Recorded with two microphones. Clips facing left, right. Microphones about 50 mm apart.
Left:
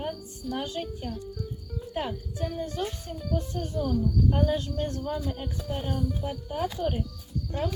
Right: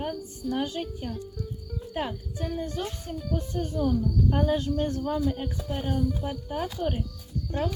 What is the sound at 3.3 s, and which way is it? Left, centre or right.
Speech, right.